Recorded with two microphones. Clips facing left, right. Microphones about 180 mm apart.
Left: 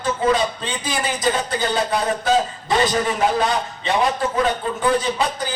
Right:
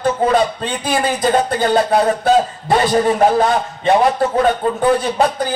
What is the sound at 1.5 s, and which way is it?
Speech, 55° right (ahead or behind).